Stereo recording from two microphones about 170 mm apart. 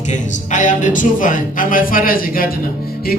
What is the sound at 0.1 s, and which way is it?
A man's voice, 45° left (ahead or behind).